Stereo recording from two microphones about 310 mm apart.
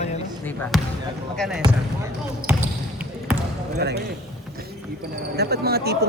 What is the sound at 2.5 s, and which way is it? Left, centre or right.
Basketball bounce, centre.